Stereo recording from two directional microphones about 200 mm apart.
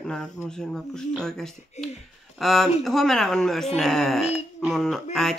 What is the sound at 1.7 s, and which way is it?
Speech, 35° left (ahead or behind).